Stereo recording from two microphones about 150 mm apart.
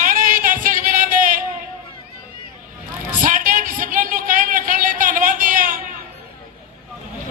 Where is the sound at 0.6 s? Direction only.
65° right (ahead or behind).